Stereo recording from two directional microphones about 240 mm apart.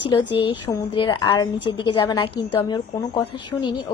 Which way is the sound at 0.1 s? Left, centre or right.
Left.